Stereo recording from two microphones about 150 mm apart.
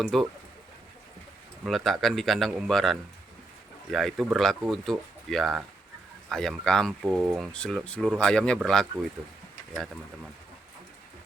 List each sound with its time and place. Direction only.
0.0 s speech: centre (ahead or behind)
1.6 s speech: centre (ahead or behind)